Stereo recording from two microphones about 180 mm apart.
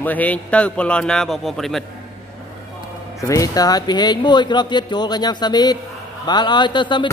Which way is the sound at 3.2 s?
20° left (ahead or behind).